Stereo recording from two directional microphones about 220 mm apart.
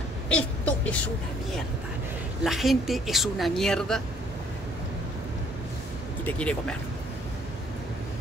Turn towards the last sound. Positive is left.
turn(degrees=5)  # may be behind; listen again after turning